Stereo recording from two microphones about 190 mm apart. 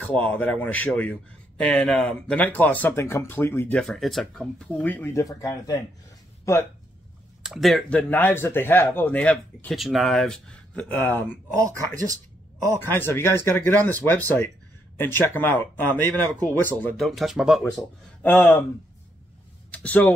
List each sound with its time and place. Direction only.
0.0 s speech: 5° left (ahead or behind)
7.4 s speech: centre (ahead or behind)
11.5 s speech: 15° right (ahead or behind)
12.9 s speech: 10° left (ahead or behind)
19.7 s a sound: 5° left (ahead or behind)